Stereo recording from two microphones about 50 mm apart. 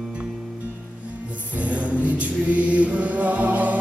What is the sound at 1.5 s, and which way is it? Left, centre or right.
Mantra, right.